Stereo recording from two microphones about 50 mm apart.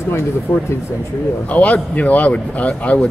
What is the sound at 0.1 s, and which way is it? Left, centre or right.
Speech, left.